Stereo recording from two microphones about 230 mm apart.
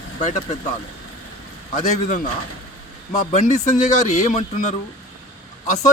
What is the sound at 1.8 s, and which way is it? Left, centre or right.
Speech, left.